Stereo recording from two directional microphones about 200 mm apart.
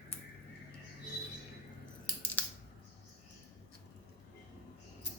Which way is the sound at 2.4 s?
10° left (ahead or behind).